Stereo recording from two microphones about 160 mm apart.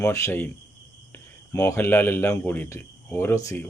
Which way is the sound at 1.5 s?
15° left (ahead or behind).